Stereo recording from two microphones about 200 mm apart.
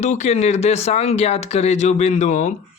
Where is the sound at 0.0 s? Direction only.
35° left (ahead or behind).